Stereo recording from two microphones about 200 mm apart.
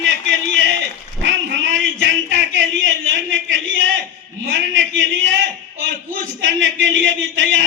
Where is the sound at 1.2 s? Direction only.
65° right (ahead or behind).